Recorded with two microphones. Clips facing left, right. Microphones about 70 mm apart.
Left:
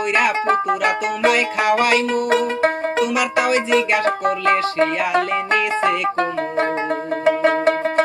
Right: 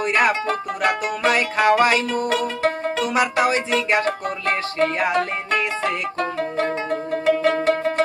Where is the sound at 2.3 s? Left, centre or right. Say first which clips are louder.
Left 5 dB; left.